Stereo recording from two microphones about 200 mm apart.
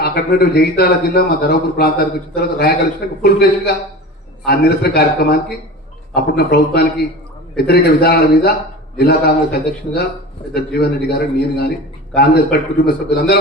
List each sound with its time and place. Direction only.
0.0 s a man's voice: 50° left (ahead or behind)
4.4 s a man's voice: 55° left (ahead or behind)